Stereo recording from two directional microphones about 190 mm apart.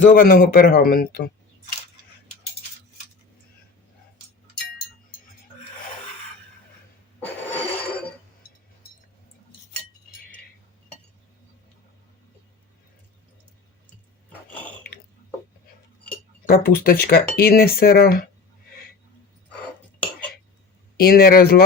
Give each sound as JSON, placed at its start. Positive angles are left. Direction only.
{"t": 0.0, "sound": "speech", "side_deg": 45}
{"t": 16.5, "sound": "speech", "side_deg": 50}
{"t": 20.9, "sound": "speech", "side_deg": 55}